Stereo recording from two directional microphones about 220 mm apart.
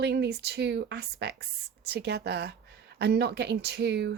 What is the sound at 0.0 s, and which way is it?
Speech, 50° right (ahead or behind).